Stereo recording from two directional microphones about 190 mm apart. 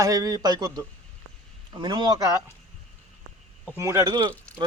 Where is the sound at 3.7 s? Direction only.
15° right (ahead or behind).